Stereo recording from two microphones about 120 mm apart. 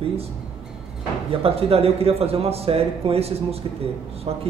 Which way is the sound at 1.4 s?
55° right (ahead or behind).